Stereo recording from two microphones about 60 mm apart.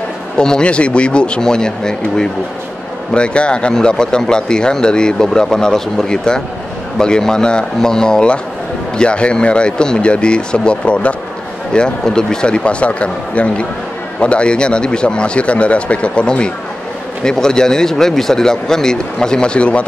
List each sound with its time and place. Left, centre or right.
0.4 s speech: centre